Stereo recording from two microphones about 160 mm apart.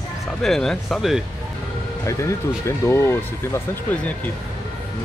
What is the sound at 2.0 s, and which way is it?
Speech, 20° left (ahead or behind).